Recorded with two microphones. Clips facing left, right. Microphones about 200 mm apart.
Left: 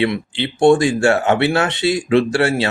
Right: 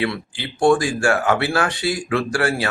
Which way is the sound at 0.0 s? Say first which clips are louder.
Left 5 dB; 25° left (ahead or behind).